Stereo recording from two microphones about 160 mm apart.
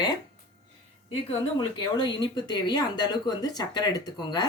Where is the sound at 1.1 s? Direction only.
30° left (ahead or behind).